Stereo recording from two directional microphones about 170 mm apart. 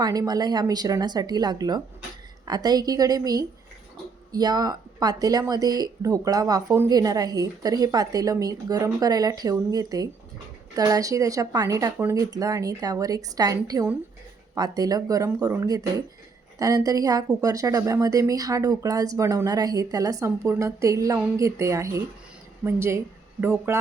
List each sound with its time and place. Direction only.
0.0 s a woman's voice: 20° right (ahead or behind)